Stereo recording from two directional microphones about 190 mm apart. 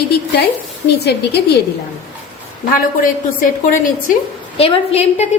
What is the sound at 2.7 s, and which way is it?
Speech, 45° left (ahead or behind).